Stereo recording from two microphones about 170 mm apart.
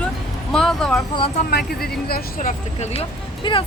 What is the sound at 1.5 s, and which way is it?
Speech, 70° left (ahead or behind).